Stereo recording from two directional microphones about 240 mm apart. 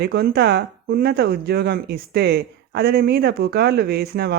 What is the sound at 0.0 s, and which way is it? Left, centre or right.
Speech, right.